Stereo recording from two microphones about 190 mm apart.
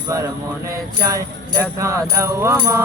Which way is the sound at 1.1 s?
15° right (ahead or behind).